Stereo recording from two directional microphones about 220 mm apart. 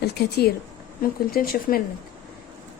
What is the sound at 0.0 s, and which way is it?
Speech, 50° left (ahead or behind).